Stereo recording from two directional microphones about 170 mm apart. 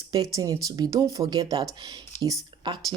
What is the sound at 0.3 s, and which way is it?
Speech, 20° right (ahead or behind).